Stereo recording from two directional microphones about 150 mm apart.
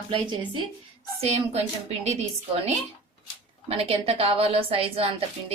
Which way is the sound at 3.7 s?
40° right (ahead or behind).